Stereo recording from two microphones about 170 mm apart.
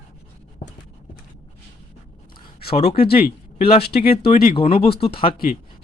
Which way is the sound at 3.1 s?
65° left (ahead or behind).